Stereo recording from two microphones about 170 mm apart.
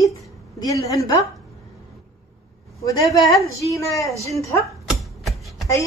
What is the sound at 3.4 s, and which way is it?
Speech, 20° left (ahead or behind).